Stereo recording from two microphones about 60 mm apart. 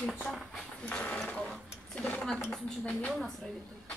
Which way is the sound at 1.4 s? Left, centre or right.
Centre.